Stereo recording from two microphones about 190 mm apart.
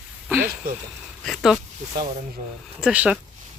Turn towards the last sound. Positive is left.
turn(degrees=-5)  # may be behind; listen again after turning